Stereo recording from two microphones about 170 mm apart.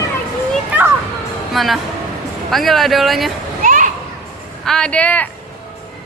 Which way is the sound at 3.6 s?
50° right (ahead or behind).